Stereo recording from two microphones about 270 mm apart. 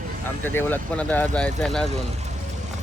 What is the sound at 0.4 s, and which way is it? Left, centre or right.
Speech, centre.